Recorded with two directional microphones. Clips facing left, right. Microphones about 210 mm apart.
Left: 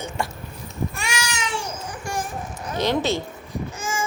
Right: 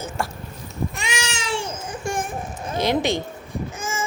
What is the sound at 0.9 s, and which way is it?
Babbling, 20° right (ahead or behind).